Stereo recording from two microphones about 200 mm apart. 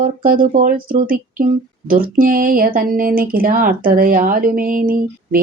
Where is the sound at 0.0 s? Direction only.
45° right (ahead or behind).